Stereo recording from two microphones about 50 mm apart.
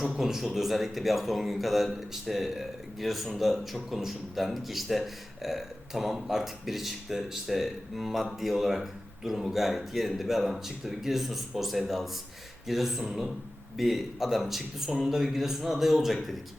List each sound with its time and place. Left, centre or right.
0.0 s speech: centre